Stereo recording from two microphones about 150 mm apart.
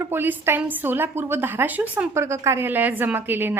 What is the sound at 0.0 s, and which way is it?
A woman's voice, 15° right (ahead or behind).